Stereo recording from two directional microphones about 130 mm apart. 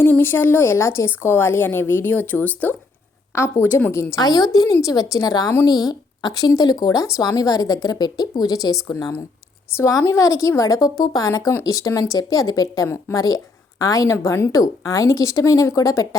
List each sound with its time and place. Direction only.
0.0 s a woman's voice: 15° left (ahead or behind)
4.2 s a woman's voice: 30° left (ahead or behind)